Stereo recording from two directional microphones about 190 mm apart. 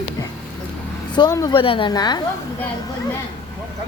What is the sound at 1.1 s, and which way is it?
Speech, 20° left (ahead or behind).